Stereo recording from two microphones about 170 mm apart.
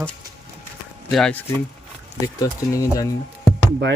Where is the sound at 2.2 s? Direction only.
20° left (ahead or behind).